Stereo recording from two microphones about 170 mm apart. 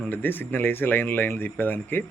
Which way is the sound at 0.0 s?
10° left (ahead or behind).